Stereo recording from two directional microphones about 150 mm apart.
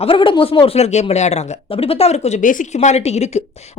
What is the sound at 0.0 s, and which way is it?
Speech, 35° left (ahead or behind).